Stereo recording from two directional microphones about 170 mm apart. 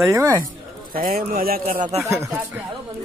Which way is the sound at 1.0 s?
55° right (ahead or behind).